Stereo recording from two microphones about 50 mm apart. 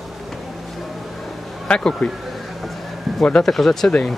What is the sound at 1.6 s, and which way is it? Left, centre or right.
Speech, left.